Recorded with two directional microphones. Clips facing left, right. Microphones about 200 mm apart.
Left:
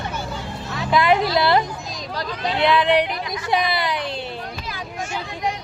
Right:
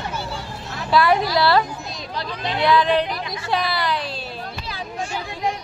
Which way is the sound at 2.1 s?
45° left (ahead or behind).